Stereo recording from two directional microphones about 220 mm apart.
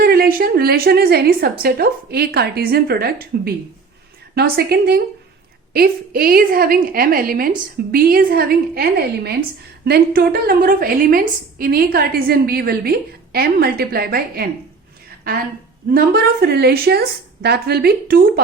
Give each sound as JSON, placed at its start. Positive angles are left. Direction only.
{"t": 0.0, "sound": "a woman's voice", "side_deg": -40}
{"t": 16.0, "sound": "a woman's voice", "side_deg": -45}